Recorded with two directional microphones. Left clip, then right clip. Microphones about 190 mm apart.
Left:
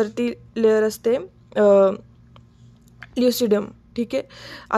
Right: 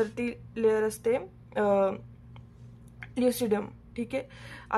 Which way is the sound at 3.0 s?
30° left (ahead or behind).